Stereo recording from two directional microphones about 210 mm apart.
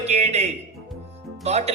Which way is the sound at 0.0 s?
30° right (ahead or behind).